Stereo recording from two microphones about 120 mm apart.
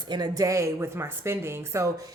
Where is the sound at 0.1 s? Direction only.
30° right (ahead or behind).